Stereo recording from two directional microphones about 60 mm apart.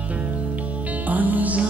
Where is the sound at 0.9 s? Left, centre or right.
Right.